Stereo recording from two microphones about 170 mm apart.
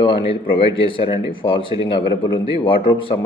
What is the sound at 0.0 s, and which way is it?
Speech, 30° left (ahead or behind).